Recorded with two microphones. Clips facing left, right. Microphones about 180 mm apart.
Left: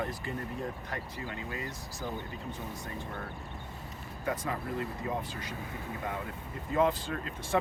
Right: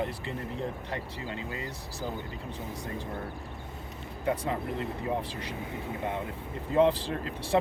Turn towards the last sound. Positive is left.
turn(degrees=-30)  # may be behind; listen again after turning